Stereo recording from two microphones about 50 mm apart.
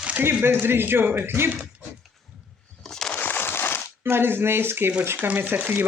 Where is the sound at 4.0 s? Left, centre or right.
Right.